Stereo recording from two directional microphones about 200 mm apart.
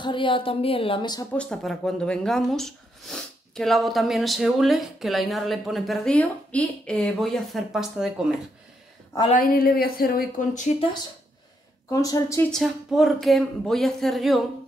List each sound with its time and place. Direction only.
0.0 s a woman's voice: 25° left (ahead or behind)
1.3 s speech: 5° left (ahead or behind)
9.3 s speech: 45° left (ahead or behind)
11.9 s speech: 15° left (ahead or behind)
12.4 s speech: centre (ahead or behind)